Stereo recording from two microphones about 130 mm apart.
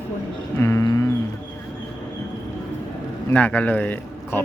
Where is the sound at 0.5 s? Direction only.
20° left (ahead or behind).